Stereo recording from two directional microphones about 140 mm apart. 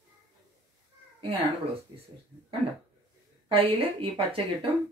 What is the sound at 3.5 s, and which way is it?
Speech, 40° right (ahead or behind).